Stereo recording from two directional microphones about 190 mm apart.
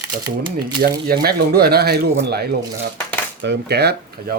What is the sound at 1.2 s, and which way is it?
Speech, 55° right (ahead or behind).